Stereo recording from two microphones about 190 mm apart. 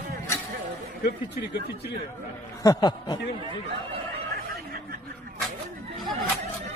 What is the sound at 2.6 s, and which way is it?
Snicker, 20° left (ahead or behind).